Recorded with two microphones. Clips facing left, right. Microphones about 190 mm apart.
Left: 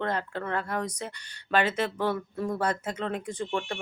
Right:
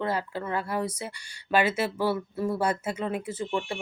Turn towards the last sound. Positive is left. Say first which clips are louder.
# right 1 dB
turn(degrees=-5)  # may be behind; listen again after turning